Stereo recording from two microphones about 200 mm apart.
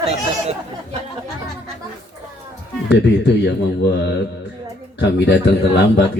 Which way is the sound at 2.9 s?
60° left (ahead or behind).